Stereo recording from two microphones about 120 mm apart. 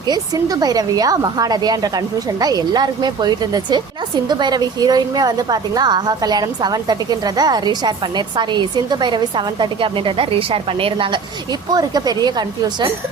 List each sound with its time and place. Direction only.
0.1 s a woman's voice: 30° right (ahead or behind)
11.7 s a woman's voice: 35° right (ahead or behind)